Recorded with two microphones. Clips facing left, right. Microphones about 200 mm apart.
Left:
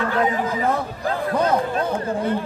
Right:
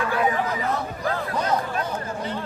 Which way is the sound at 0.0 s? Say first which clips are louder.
Left 3 dB; 10° right (ahead or behind).